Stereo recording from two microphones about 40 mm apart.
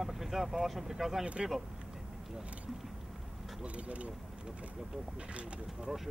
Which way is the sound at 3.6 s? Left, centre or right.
Right.